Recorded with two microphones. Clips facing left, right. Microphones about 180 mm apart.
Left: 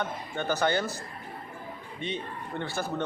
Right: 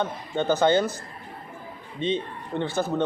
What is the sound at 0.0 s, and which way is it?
Speech, 20° right (ahead or behind).